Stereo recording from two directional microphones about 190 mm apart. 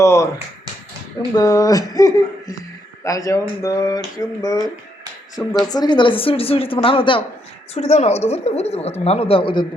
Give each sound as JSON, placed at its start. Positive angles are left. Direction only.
{"t": 0.0, "sound": "a sound", "side_deg": 15}
{"t": 1.4, "sound": "speech", "side_deg": 20}
{"t": 5.4, "sound": "speech", "side_deg": 5}
{"t": 5.6, "sound": "speech", "side_deg": 20}